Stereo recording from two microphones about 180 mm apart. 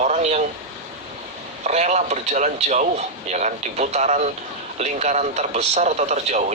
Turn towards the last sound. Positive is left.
turn(degrees=-40)  # may be behind; listen again after turning